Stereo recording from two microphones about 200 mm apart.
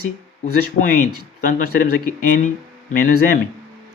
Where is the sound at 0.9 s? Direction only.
40° left (ahead or behind).